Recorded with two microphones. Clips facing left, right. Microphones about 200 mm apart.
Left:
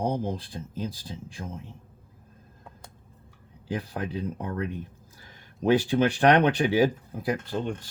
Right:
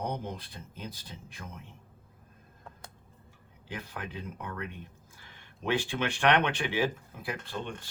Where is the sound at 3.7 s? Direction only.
35° left (ahead or behind).